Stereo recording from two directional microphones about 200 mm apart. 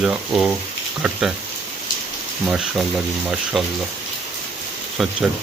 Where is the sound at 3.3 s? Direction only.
5° right (ahead or behind).